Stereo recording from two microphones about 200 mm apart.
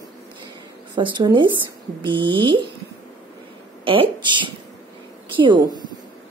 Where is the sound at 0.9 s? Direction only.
25° right (ahead or behind).